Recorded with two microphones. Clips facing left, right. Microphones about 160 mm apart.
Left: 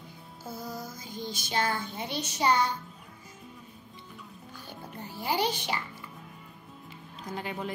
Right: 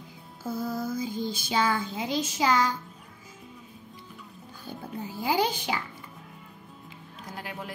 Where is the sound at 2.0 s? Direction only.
90° right.